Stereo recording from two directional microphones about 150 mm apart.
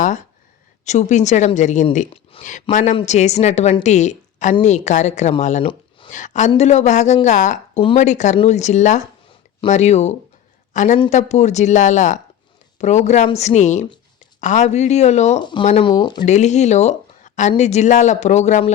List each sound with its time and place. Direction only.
0.9 s a woman's voice: 55° left (ahead or behind)
15.4 s speech: 30° left (ahead or behind)
16.2 s speech: 50° left (ahead or behind)